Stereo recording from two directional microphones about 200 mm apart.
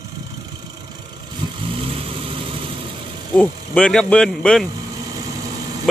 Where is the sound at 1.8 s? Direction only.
30° right (ahead or behind).